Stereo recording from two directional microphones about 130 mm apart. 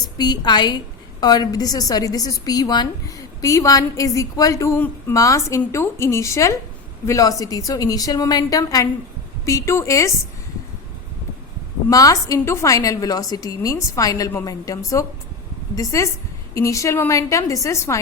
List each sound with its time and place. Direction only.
0.0 s a woman's voice: 30° left (ahead or behind)
11.9 s a woman's voice: 30° left (ahead or behind)